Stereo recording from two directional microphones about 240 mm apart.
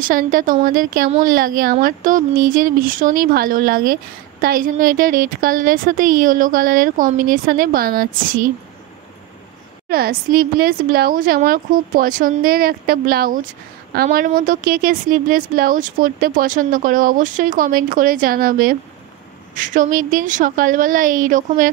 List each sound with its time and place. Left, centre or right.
0.0 s speech: right
9.8 s speech: right